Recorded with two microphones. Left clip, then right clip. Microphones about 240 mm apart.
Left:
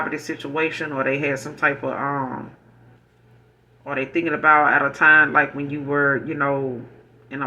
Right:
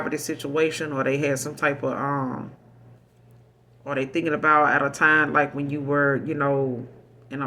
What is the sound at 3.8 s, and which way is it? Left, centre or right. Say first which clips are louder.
Speech: left 2 dB; right.